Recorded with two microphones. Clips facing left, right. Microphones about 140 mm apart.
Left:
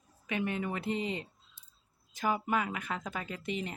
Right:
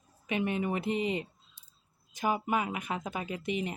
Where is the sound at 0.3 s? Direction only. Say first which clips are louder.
Right 3 dB; 20° right (ahead or behind).